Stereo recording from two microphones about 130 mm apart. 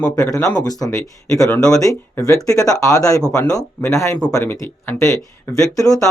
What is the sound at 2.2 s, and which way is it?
Speech, 25° left (ahead or behind).